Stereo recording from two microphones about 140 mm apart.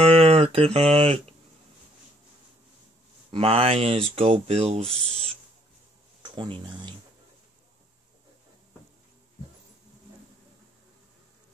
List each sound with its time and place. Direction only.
0.0 s a sound: 45° right (ahead or behind)
3.3 s speech: 40° right (ahead or behind)
6.2 s speech: 35° right (ahead or behind)